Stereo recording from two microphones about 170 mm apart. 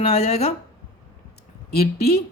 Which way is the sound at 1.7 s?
65° left (ahead or behind).